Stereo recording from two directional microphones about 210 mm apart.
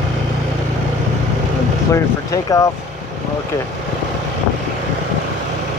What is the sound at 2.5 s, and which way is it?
Speech, 15° left (ahead or behind).